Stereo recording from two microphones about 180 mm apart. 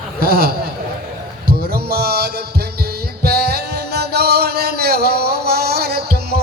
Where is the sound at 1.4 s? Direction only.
60° right (ahead or behind).